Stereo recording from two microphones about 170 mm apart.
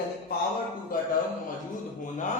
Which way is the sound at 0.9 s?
55° left (ahead or behind).